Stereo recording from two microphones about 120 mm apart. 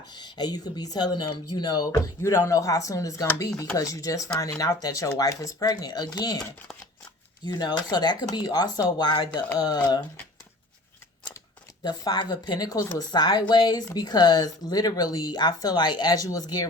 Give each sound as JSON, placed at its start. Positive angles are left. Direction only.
{"t": 0.1, "sound": "speech", "side_deg": 40}
{"t": 7.4, "sound": "speech", "side_deg": 35}
{"t": 11.8, "sound": "speech", "side_deg": 35}